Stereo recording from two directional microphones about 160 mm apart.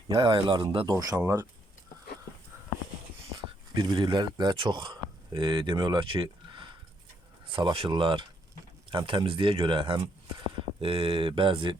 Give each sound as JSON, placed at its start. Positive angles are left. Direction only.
{"t": 0.2, "sound": "speech", "side_deg": -30}
{"t": 3.3, "sound": "speech", "side_deg": -25}